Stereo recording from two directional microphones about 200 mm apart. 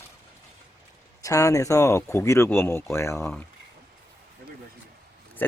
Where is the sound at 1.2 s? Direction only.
15° left (ahead or behind).